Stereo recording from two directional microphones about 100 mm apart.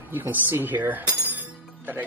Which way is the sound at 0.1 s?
20° right (ahead or behind).